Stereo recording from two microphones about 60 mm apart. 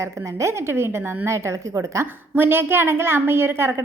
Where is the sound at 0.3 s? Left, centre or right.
Right.